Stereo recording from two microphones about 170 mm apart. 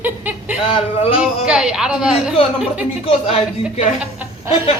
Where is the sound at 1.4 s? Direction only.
5° right (ahead or behind).